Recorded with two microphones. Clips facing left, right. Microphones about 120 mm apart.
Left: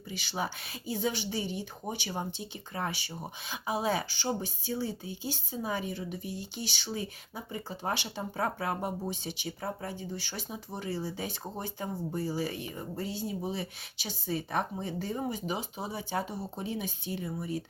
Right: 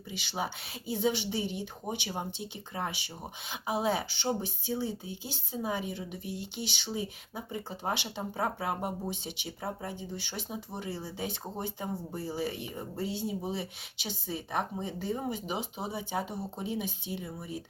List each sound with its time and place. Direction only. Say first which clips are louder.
0.1 s speech: even; 20° right (ahead or behind)